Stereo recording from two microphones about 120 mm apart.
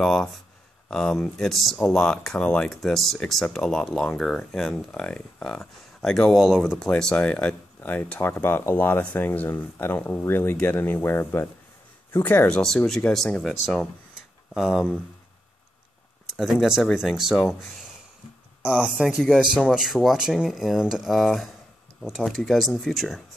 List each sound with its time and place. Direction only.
0.0 s speech: 5° left (ahead or behind)
16.3 s speech: centre (ahead or behind)
18.6 s speech: 10° right (ahead or behind)